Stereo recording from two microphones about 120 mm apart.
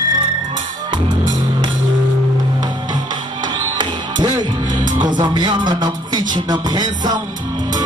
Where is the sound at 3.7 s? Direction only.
40° right (ahead or behind).